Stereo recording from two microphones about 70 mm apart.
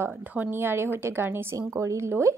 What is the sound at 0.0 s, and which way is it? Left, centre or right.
Speech, right.